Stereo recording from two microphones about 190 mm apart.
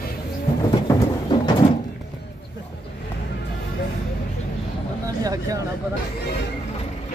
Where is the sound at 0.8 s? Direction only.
20° left (ahead or behind).